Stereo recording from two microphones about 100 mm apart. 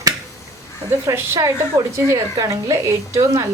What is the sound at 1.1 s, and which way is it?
A woman's voice, 30° right (ahead or behind).